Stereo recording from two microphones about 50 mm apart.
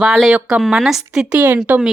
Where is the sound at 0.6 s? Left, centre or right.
Centre.